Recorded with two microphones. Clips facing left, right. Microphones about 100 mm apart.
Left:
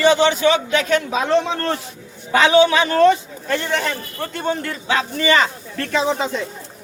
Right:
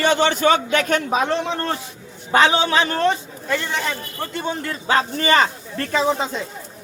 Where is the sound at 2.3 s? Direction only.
35° right (ahead or behind).